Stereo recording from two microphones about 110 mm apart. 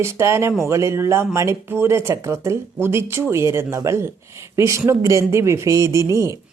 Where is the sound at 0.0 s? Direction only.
25° right (ahead or behind).